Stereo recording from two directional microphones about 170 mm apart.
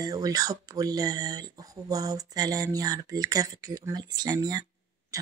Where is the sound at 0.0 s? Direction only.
20° right (ahead or behind).